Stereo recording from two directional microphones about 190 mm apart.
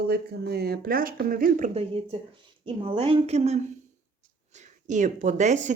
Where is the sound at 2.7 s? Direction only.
30° right (ahead or behind).